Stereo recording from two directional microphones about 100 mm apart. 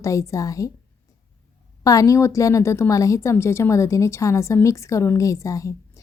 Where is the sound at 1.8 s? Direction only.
35° left (ahead or behind).